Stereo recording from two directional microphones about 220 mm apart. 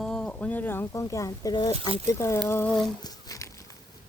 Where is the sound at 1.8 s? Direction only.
25° right (ahead or behind).